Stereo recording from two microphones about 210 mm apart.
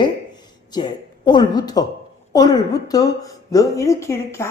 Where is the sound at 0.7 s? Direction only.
20° left (ahead or behind).